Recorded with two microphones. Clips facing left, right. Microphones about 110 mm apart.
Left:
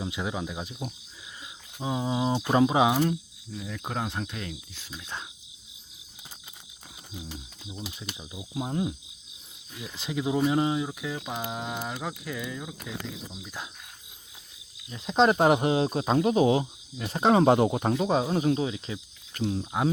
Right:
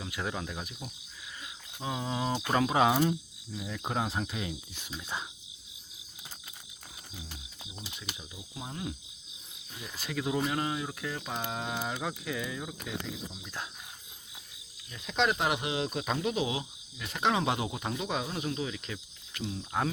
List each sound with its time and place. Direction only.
0.0 s speech: 15° left (ahead or behind)
1.8 s speech: 15° left (ahead or behind)
2.9 s speech: centre (ahead or behind)
7.3 s speech: 30° left (ahead or behind)
8.1 s cricket: 20° left (ahead or behind)
10.0 s speech: 15° left (ahead or behind)
14.8 s speech: 30° left (ahead or behind)
19.3 s speech: 45° left (ahead or behind)